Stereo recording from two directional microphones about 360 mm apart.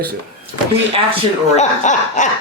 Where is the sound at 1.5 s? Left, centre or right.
Centre.